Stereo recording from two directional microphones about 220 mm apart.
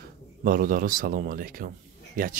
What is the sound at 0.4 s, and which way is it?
Speech, 40° right (ahead or behind).